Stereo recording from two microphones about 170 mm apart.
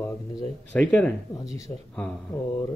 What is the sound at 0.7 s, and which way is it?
Speech, 10° left (ahead or behind).